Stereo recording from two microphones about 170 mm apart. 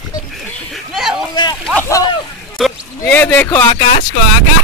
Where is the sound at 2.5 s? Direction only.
5° left (ahead or behind).